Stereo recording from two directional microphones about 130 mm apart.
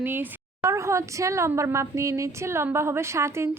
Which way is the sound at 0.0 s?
15° right (ahead or behind).